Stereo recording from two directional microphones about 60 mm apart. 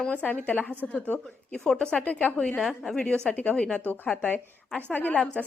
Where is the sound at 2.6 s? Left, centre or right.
Centre.